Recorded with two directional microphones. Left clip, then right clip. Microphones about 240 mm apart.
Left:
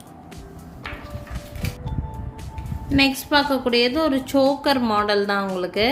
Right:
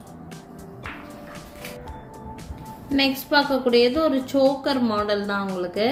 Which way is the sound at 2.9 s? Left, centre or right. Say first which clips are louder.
Left 2 dB; left.